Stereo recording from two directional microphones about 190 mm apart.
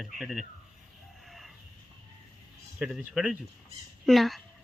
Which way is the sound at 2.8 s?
5° right (ahead or behind).